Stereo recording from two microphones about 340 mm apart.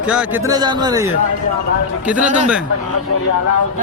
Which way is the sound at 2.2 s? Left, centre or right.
Right.